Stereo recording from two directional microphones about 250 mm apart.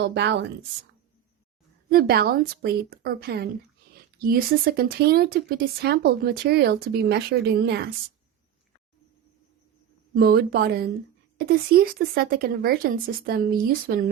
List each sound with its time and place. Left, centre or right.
0.0 s a woman's voice: right
1.9 s speech: right
10.2 s speech: right